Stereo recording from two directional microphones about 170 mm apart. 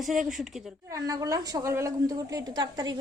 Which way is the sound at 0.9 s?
20° right (ahead or behind).